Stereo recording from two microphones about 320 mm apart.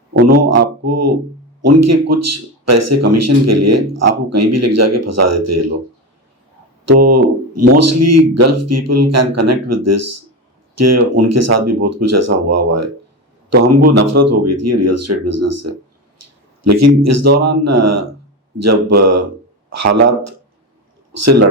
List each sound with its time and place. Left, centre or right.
0.3 s speech: right
6.8 s a man's voice: right
21.1 s a man's voice: right